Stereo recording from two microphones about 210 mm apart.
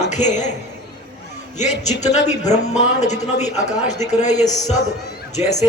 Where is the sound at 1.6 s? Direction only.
35° left (ahead or behind).